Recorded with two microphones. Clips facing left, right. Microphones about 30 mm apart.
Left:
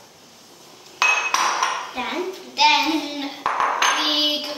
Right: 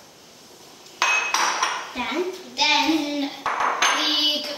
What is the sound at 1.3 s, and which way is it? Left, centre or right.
Cutlery, left.